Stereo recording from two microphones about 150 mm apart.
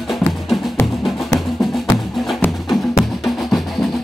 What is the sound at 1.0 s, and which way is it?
Music, centre (ahead or behind).